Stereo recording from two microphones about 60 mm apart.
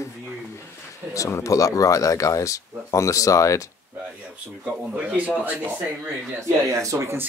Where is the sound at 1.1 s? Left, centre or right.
Left.